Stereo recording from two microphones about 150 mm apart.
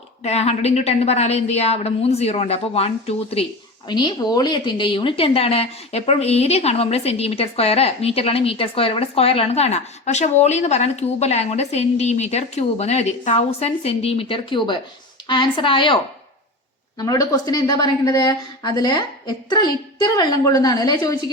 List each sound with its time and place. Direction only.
0.2 s speech: 45° left (ahead or behind)
3.8 s a woman's voice: 30° left (ahead or behind)
17.0 s speech: 25° left (ahead or behind)